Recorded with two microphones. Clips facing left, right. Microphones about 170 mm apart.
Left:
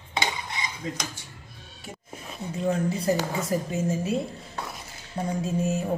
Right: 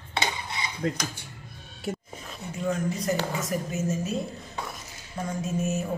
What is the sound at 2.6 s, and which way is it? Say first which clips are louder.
A man's voice: left 3 dB; 30° left (ahead or behind).